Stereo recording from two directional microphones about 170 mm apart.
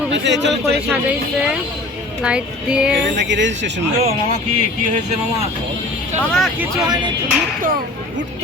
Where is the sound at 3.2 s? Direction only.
90° right.